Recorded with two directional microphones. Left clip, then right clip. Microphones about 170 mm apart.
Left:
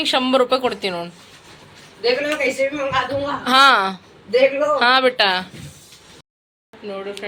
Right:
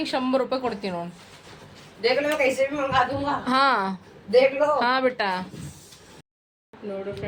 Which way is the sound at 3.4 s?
10° right (ahead or behind).